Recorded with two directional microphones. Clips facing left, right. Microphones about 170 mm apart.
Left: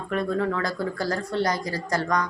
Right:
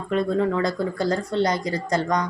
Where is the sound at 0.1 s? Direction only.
20° right (ahead or behind).